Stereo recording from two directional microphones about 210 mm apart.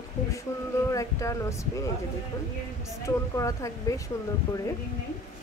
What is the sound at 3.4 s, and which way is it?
Speech, 15° left (ahead or behind).